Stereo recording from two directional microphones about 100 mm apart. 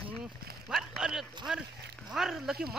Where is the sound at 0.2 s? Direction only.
5° right (ahead or behind).